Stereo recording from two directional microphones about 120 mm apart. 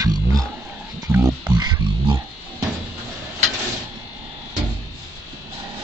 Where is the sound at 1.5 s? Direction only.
35° right (ahead or behind).